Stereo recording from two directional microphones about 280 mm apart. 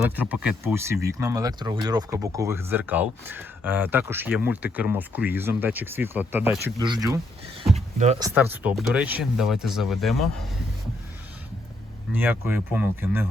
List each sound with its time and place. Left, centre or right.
0.2 s speech: centre
7.9 s speech: right
8.2 s speech: centre
12.2 s speech: centre